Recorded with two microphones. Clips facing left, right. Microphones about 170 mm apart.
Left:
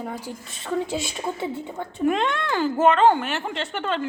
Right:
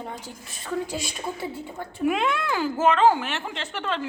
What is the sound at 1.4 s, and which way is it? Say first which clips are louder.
Speech: left 3 dB; 20° left (ahead or behind).